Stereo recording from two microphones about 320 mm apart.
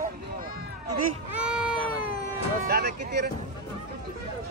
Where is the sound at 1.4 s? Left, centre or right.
Centre.